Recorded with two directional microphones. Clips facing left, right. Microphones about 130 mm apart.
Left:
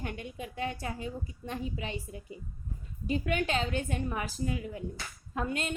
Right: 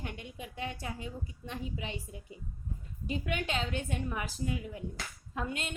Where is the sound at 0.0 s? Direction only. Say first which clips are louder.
Left 4 dB; 50° left (ahead or behind).